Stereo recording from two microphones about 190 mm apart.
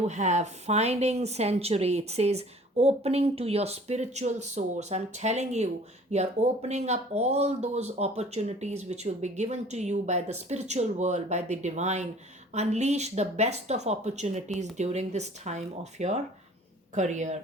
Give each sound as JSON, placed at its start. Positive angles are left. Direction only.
{"t": 0.1, "sound": "a woman's voice", "side_deg": -40}